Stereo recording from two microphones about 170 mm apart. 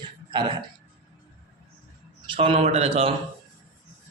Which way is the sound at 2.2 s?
30° right (ahead or behind).